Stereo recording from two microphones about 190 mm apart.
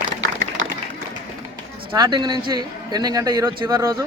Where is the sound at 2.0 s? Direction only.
20° right (ahead or behind).